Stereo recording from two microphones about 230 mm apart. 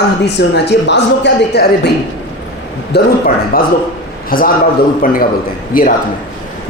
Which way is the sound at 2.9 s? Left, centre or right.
Left.